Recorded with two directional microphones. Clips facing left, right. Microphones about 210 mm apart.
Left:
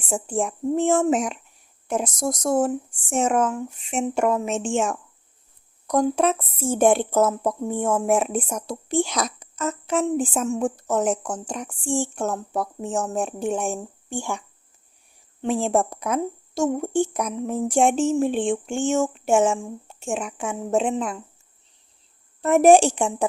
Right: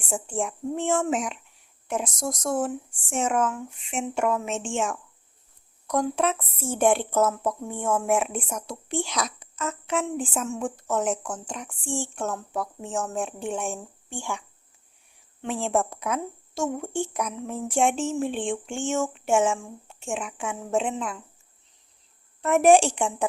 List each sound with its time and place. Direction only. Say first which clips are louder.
0.1 s speech: left 4 dB; 40° left (ahead or behind)
22.4 s speech: left 3 dB; 40° left (ahead or behind)